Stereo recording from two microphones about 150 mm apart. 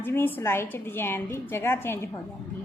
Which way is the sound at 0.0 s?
15° left (ahead or behind).